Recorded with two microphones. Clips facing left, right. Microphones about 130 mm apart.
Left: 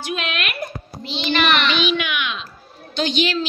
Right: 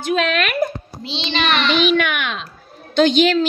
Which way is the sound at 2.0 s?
55° right (ahead or behind).